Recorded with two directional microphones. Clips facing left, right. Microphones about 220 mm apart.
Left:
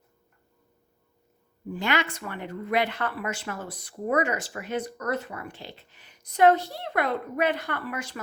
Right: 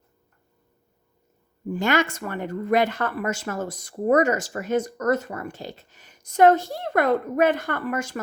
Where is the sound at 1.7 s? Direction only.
45° right (ahead or behind).